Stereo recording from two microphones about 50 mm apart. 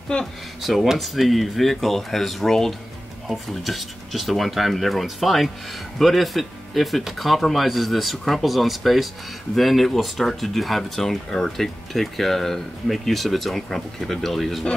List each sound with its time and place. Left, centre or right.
0.1 s speech: centre
0.6 s speech: centre